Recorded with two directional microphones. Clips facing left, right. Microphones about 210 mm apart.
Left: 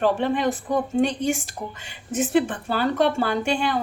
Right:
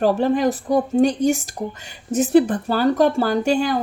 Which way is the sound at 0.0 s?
40° right (ahead or behind).